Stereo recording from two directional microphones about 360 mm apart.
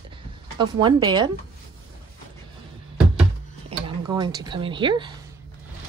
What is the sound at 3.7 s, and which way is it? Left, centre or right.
Speech, centre.